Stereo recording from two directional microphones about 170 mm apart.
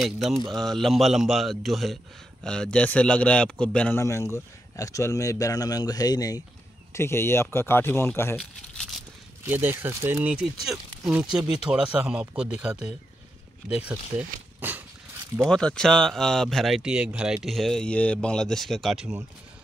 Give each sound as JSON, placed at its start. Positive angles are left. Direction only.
{"t": 0.0, "sound": "speech", "side_deg": 0}
{"t": 4.0, "sound": "speech", "side_deg": 15}
{"t": 9.4, "sound": "speech", "side_deg": -15}
{"t": 13.7, "sound": "a sound", "side_deg": -5}
{"t": 15.4, "sound": "speech", "side_deg": 5}